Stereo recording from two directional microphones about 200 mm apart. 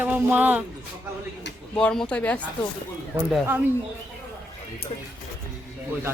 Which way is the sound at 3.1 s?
10° right (ahead or behind).